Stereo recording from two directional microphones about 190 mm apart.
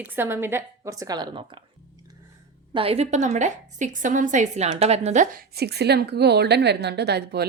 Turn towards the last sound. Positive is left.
turn(degrees=-60)  # may be behind; listen again after turning